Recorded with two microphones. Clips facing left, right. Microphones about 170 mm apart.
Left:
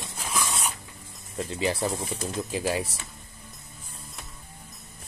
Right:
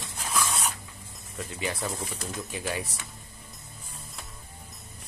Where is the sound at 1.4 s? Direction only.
30° left (ahead or behind).